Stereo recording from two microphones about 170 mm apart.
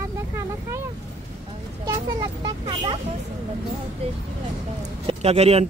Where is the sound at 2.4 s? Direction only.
30° right (ahead or behind).